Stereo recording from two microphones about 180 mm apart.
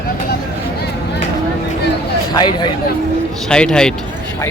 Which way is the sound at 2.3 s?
25° left (ahead or behind).